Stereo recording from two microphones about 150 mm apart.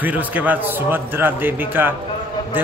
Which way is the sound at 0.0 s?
10° right (ahead or behind).